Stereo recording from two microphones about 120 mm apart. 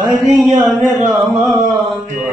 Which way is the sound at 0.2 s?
Centre (ahead or behind).